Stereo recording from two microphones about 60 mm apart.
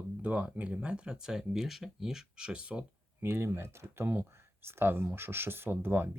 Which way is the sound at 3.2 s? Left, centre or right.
Right.